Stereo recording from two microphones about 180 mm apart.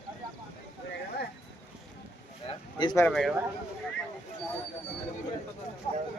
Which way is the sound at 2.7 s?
25° left (ahead or behind).